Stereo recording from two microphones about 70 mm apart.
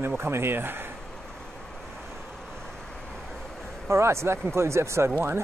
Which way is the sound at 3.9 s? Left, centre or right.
Right.